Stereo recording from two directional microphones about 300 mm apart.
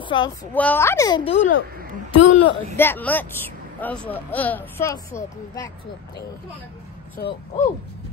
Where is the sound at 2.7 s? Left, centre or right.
Centre.